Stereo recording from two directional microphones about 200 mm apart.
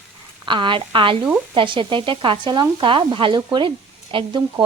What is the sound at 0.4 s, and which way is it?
A woman's voice, 25° right (ahead or behind).